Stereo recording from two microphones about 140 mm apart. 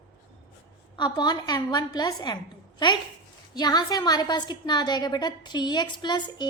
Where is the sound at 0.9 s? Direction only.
30° left (ahead or behind).